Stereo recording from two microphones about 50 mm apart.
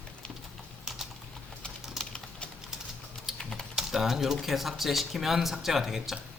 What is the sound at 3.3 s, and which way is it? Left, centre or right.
Typing, centre.